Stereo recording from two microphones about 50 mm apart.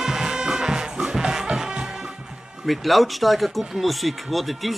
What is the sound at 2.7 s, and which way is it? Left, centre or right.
Speech, centre.